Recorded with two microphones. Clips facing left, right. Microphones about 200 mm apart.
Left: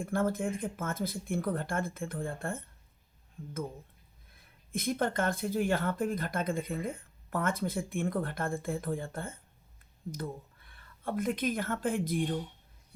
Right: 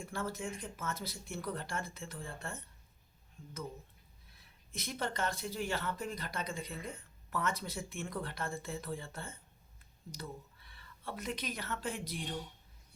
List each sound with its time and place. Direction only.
0.0 s speech: 55° left (ahead or behind)